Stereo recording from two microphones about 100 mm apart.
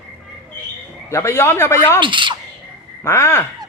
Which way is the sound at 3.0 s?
25° left (ahead or behind).